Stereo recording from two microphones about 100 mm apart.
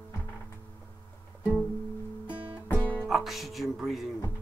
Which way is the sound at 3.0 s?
Centre (ahead or behind).